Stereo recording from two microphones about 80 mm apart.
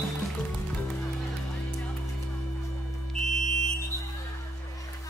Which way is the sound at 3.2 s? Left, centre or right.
Centre.